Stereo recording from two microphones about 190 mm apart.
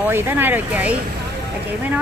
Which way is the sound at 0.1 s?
10° right (ahead or behind).